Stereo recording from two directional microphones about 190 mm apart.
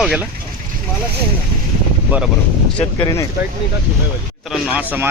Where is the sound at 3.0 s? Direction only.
15° left (ahead or behind).